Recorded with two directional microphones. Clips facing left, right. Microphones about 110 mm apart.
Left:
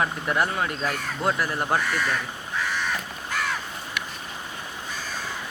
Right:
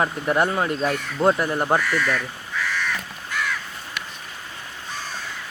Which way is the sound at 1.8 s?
20° left (ahead or behind).